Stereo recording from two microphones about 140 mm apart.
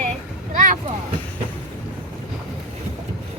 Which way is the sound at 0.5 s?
65° right (ahead or behind).